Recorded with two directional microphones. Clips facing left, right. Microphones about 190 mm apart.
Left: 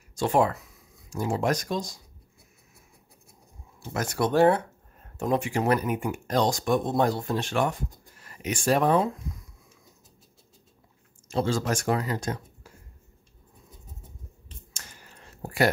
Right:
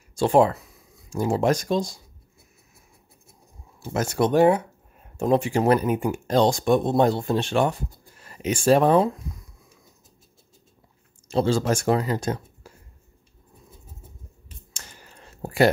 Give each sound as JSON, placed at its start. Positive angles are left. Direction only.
{"t": 0.1, "sound": "speech", "side_deg": -30}
{"t": 3.9, "sound": "speech", "side_deg": -25}
{"t": 5.1, "sound": "speech", "side_deg": -30}
{"t": 11.3, "sound": "speech", "side_deg": -30}
{"t": 15.4, "sound": "a sound", "side_deg": -25}